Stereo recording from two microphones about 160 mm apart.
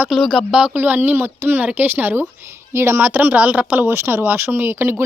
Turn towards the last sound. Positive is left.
turn(degrees=-15)  # may be behind; listen again after turning